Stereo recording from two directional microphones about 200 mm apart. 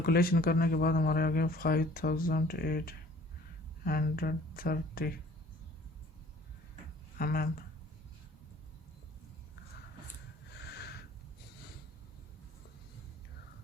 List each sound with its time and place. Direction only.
0.0 s speech: 50° left (ahead or behind)
7.2 s speech: 50° left (ahead or behind)
10.6 s a sound: 55° left (ahead or behind)